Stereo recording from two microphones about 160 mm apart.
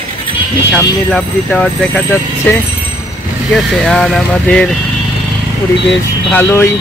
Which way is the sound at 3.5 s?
Centre (ahead or behind).